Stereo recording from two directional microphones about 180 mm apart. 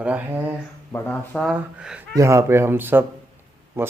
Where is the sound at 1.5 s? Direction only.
5° right (ahead or behind).